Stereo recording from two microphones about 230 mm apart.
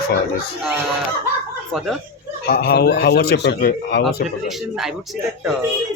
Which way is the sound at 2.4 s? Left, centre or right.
Left.